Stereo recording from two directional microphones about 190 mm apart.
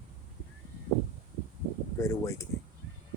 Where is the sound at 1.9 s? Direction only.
15° left (ahead or behind).